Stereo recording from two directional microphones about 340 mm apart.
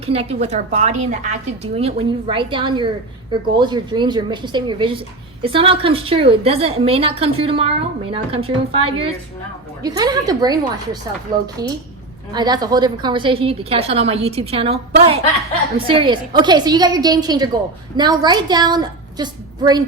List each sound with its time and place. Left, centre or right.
0.0 s a woman's voice: centre